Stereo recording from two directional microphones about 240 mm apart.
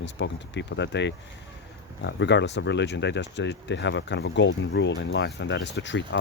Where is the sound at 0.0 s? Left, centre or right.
Left.